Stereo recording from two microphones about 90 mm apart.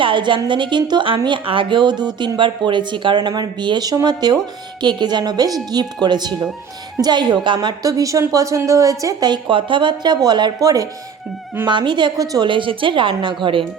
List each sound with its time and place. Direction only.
0.0 s a woman's voice: 65° right (ahead or behind)
7.8 s a woman's voice: 40° right (ahead or behind)
9.3 s a woman's voice: 70° right (ahead or behind); by 10.8 s 40° right (ahead or behind)
11.6 s a woman's voice: 60° right (ahead or behind)
12.1 s speech: 45° right (ahead or behind)
12.5 s a woman's voice: 70° right (ahead or behind)